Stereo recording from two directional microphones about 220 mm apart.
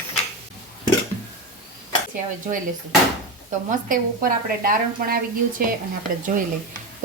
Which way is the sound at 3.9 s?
40° right (ahead or behind).